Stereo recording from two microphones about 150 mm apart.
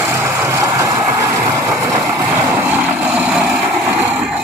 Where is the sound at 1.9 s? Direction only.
10° right (ahead or behind).